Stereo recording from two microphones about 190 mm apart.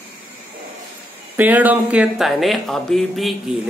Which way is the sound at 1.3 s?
10° right (ahead or behind).